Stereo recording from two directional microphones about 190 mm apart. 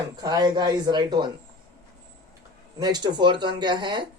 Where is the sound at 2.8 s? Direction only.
20° right (ahead or behind).